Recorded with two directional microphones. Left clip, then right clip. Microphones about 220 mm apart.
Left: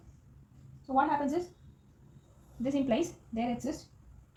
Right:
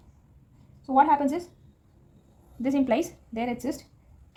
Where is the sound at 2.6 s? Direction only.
20° right (ahead or behind).